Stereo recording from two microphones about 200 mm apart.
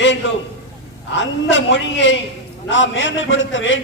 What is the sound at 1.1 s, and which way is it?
A man's voice, 65° left (ahead or behind).